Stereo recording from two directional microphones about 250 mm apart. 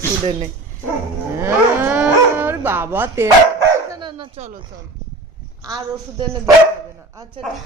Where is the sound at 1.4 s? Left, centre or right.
Centre.